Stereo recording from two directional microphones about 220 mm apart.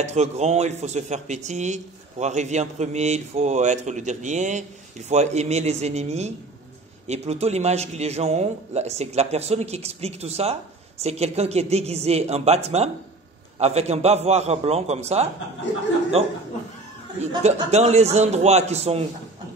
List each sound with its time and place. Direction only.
0.0 s a man's voice: 30° right (ahead or behind)
17.4 s a man's voice: 30° right (ahead or behind)